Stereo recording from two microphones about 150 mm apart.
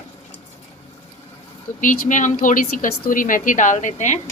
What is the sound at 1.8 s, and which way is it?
A woman's voice, 60° left (ahead or behind).